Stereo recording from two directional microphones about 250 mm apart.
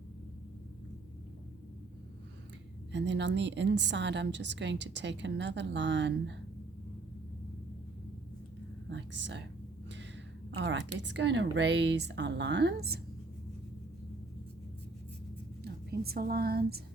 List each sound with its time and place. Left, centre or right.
2.9 s a woman's voice: right
8.9 s a sound: right
10.5 s a woman's voice: right
15.6 s a woman's voice: right